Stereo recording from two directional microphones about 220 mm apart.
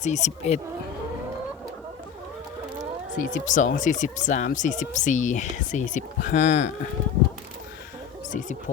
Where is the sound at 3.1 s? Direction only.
35° left (ahead or behind).